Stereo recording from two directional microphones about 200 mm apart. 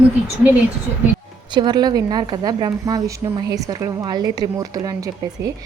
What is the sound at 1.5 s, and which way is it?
A woman's voice, 20° right (ahead or behind).